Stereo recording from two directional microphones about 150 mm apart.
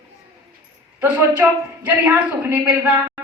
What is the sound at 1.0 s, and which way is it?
A woman's voice, 10° right (ahead or behind).